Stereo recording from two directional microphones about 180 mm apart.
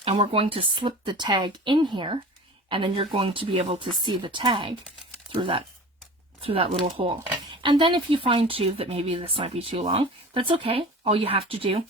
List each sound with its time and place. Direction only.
0.0 s speech: 30° right (ahead or behind)